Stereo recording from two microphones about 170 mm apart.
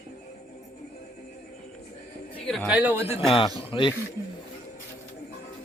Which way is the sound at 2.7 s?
10° right (ahead or behind).